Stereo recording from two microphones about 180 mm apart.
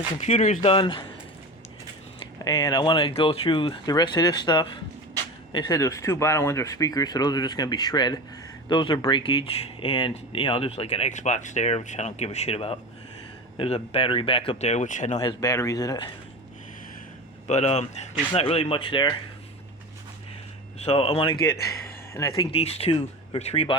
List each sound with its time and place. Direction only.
0.2 s speech: 40° left (ahead or behind)
0.6 s speech: 30° left (ahead or behind)
2.4 s speech: 20° left (ahead or behind); by 15.2 s 40° left (ahead or behind)
15.2 s speech: 20° left (ahead or behind)
17.5 s speech: 40° left (ahead or behind)
20.7 s speech: 35° left (ahead or behind)
22.1 s speech: 15° left (ahead or behind)
22.5 s speech: 35° left (ahead or behind)